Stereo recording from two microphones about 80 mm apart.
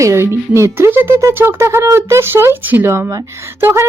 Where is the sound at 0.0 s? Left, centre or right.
Right.